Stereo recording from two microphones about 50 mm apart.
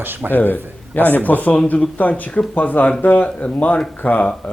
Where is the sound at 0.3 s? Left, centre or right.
Left.